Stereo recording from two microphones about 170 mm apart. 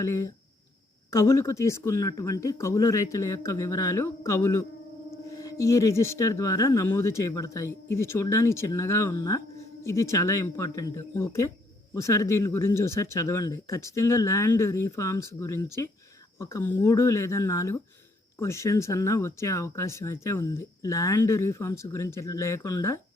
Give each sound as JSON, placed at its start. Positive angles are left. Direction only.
{"t": 0.0, "sound": "speech", "side_deg": 15}